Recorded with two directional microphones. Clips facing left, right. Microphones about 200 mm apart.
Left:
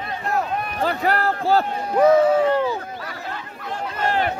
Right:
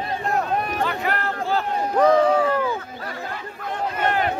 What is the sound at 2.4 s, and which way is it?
Speech, 25° left (ahead or behind).